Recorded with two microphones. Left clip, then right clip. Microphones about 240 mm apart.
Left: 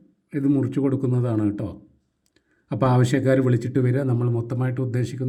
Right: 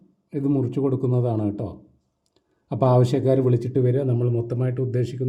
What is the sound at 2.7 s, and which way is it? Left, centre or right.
A man's voice, centre.